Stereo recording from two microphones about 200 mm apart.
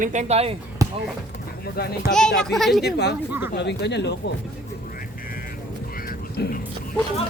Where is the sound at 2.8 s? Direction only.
55° left (ahead or behind).